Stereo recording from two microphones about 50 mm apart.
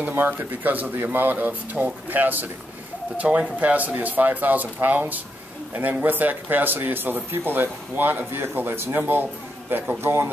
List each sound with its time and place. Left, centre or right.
0.0 s speech: right
3.2 s speech: right